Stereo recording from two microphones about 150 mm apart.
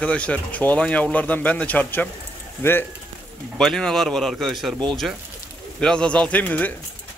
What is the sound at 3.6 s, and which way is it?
Speech, 5° left (ahead or behind).